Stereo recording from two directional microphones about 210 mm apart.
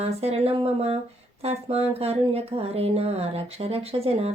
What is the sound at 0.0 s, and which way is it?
Speech, 30° right (ahead or behind).